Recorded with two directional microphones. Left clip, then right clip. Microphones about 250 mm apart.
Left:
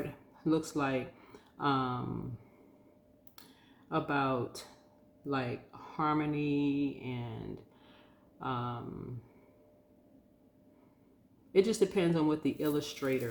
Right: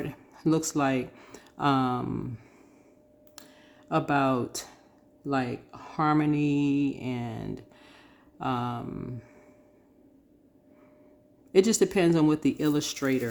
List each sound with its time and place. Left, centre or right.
0.3 s speech: right
3.8 s speech: right
11.5 s speech: right